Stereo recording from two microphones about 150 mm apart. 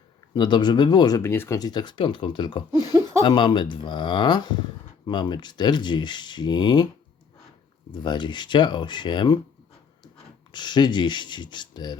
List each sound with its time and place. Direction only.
0.3 s speech: 30° left (ahead or behind)
2.9 s speech: 20° right (ahead or behind)
3.2 s speech: 30° left (ahead or behind)
7.9 s speech: 30° left (ahead or behind)
10.5 s speech: 30° left (ahead or behind)